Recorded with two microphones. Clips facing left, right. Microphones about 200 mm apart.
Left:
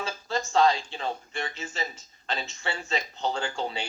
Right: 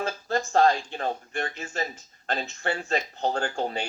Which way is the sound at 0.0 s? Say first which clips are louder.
Right 3 dB; 55° right (ahead or behind).